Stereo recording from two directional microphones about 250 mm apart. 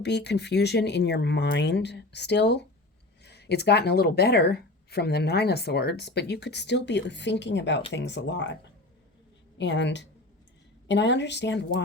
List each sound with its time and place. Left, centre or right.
0.0 s a woman's voice: left
9.6 s speech: left